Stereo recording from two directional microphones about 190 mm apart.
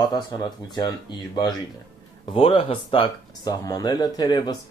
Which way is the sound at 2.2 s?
30° left (ahead or behind).